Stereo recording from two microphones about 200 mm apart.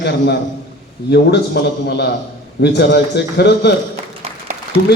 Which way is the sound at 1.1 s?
55° left (ahead or behind).